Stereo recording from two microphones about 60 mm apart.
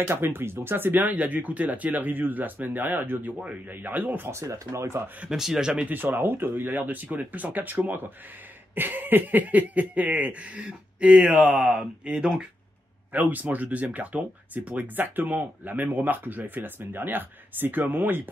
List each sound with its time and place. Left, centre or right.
0.1 s speech: right
4.3 s speech: right
5.3 s speech: centre
5.9 s speech: right; by 12.4 s centre
13.1 s speech: right